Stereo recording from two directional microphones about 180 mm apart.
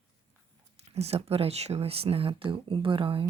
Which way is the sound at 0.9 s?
35° right (ahead or behind).